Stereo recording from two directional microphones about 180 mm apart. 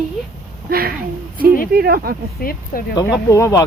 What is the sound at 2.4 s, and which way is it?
Speech, 55° left (ahead or behind).